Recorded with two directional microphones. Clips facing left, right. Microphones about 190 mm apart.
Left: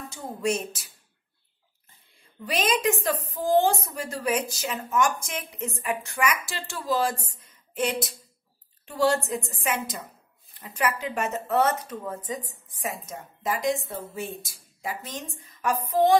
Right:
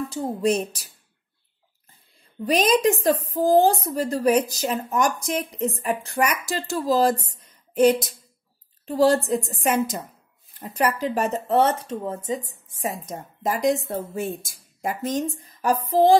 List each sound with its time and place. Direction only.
0.1 s a woman's voice: 35° right (ahead or behind)
2.4 s a woman's voice: 40° right (ahead or behind)
13.1 s a woman's voice: 40° right (ahead or behind)